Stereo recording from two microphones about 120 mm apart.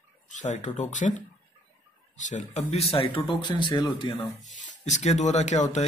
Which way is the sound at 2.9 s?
50° left (ahead or behind).